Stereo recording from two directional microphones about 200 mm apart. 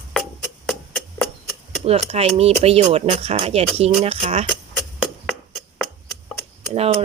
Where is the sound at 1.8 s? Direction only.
30° right (ahead or behind).